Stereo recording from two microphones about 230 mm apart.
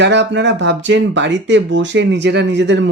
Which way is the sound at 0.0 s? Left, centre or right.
Right.